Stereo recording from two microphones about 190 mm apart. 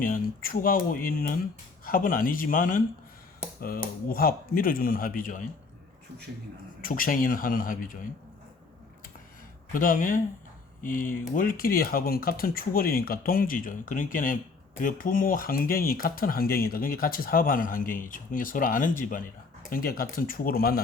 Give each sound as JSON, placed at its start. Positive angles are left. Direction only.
{"t": 0.0, "sound": "speech", "side_deg": 50}
{"t": 6.8, "sound": "speech", "side_deg": 45}
{"t": 9.7, "sound": "speech", "side_deg": 45}